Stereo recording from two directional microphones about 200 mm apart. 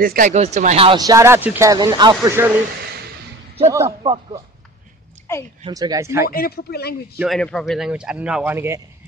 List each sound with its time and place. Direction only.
0.0 s speech: 45° right (ahead or behind); by 2.5 s 15° right (ahead or behind)
3.6 s speech: 15° right (ahead or behind)
4.0 s speech: 25° right (ahead or behind)
5.3 s a woman's voice: 10° left (ahead or behind)
5.7 s speech: 15° right (ahead or behind)
6.3 s speech: 50° left (ahead or behind)
7.2 s a man's voice: centre (ahead or behind)